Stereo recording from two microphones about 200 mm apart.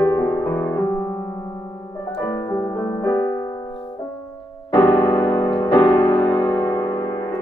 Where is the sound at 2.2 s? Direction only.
10° left (ahead or behind).